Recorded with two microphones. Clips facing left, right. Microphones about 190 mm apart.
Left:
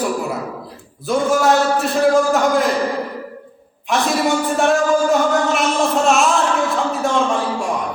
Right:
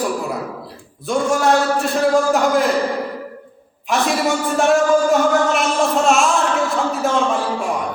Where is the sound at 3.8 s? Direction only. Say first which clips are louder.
Left 1 dB; centre (ahead or behind).